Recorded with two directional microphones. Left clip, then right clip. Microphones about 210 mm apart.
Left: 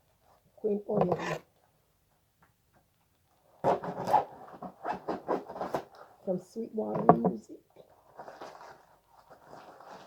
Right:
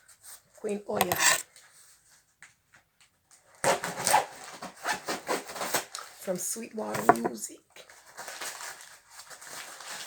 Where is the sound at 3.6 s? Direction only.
20° right (ahead or behind).